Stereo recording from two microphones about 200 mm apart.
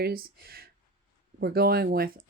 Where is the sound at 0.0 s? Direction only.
50° right (ahead or behind).